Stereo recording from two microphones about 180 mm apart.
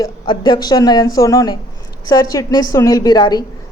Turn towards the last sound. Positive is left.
turn(degrees=20)  # may be behind; listen again after turning